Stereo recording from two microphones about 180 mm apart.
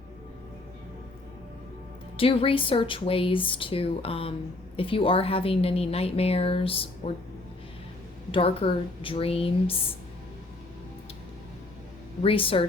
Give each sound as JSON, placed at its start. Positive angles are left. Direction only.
{"t": 2.1, "sound": "a woman's voice", "side_deg": 30}
{"t": 8.3, "sound": "a woman's voice", "side_deg": 30}
{"t": 12.2, "sound": "a woman's voice", "side_deg": 30}